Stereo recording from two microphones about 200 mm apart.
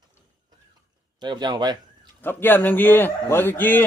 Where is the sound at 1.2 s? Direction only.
20° right (ahead or behind).